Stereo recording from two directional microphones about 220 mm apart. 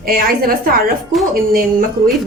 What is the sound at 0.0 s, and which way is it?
Speech, 40° right (ahead or behind).